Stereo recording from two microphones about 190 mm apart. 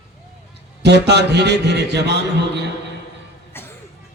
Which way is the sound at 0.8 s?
60° right (ahead or behind).